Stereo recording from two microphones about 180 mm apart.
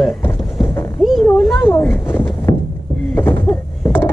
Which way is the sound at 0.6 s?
20° left (ahead or behind).